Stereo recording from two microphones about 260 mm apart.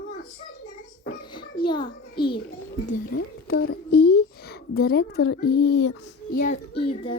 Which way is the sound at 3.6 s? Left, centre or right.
Left.